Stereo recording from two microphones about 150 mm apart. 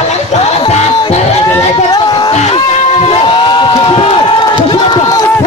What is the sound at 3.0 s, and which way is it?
Crowd, 35° left (ahead or behind).